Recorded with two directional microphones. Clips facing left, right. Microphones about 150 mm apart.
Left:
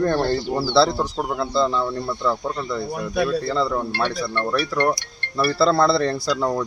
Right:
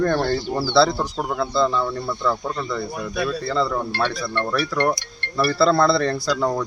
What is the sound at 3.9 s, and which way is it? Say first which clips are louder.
Speech: even; 15° left (ahead or behind).